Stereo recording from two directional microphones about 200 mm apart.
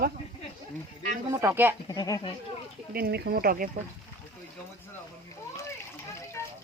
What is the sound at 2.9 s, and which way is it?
Speech, 50° right (ahead or behind).